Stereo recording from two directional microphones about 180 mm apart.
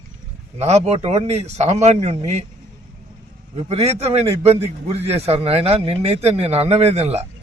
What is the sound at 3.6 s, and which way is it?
A man's voice, 35° right (ahead or behind).